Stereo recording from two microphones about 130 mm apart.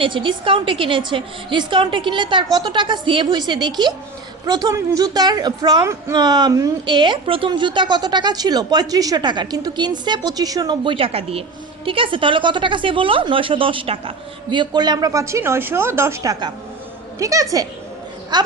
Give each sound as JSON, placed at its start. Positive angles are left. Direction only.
{"t": 0.0, "sound": "a woman's voice", "side_deg": -40}
{"t": 5.8, "sound": "speech", "side_deg": -20}
{"t": 6.1, "sound": "a woman's voice", "side_deg": -35}